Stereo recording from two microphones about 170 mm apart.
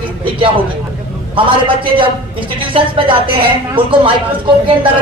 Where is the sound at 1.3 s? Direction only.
30° right (ahead or behind).